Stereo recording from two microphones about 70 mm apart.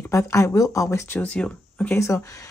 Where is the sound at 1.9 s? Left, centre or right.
Left.